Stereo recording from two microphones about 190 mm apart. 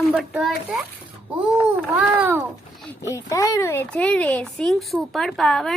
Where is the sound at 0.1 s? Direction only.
Centre (ahead or behind).